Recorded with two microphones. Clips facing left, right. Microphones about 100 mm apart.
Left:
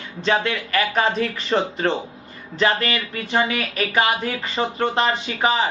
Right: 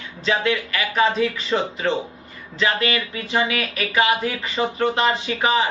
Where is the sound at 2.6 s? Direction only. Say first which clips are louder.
Left 1 dB; 35° left (ahead or behind).